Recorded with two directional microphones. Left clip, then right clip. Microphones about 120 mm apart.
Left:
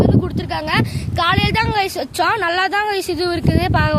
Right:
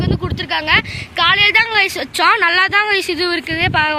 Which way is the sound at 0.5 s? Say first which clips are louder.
Right 6 dB; 80° left.